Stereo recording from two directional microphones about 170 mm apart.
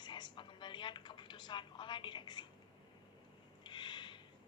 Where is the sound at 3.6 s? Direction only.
25° left (ahead or behind).